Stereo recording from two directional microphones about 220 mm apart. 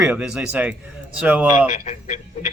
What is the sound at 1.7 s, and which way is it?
Speech, 30° left (ahead or behind).